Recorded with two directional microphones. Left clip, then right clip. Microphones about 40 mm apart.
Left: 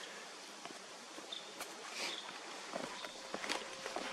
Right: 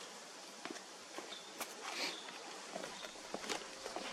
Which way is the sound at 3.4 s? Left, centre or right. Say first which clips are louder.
Left 3 dB; centre.